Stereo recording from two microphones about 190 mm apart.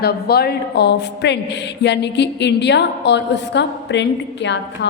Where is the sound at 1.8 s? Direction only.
65° left (ahead or behind).